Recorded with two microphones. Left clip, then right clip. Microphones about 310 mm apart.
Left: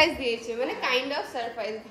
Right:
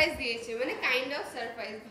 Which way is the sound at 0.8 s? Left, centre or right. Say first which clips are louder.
Left 2 dB; centre.